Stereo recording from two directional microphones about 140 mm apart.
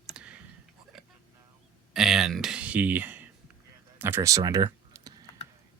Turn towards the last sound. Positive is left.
turn(degrees=-25)  # may be behind; listen again after turning